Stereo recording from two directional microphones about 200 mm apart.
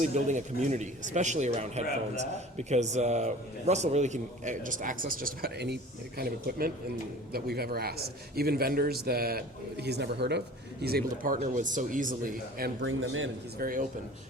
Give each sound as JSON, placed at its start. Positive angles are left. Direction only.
{"t": 0.0, "sound": "a man's voice", "side_deg": -35}
{"t": 12.8, "sound": "a man's voice", "side_deg": -80}
{"t": 13.6, "sound": "a man's voice", "side_deg": -45}